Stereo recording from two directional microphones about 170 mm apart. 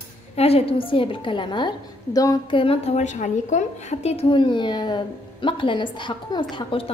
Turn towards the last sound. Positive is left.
turn(degrees=30)  # may be behind; listen again after turning